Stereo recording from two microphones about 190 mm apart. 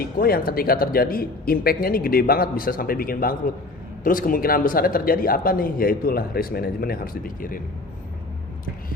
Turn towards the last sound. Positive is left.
turn(degrees=50)  # may be behind; listen again after turning